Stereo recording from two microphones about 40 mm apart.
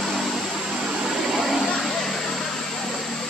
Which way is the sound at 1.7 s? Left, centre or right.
Centre.